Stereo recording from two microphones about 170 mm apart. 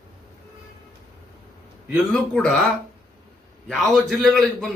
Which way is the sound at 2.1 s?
Centre (ahead or behind).